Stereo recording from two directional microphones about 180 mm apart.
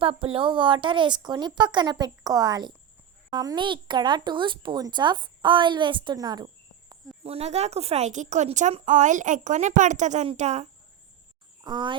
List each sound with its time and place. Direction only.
0.0 s speech: 30° right (ahead or behind)
7.3 s speech: 35° right (ahead or behind)
11.6 s speech: 25° right (ahead or behind)